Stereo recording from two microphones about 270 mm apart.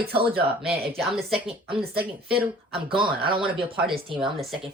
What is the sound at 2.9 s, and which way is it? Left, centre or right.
Speech, centre.